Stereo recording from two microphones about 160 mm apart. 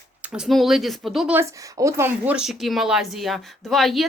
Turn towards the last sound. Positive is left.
turn(degrees=0)  # may be behind; listen again after turning